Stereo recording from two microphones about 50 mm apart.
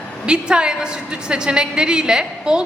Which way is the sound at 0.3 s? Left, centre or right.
Centre.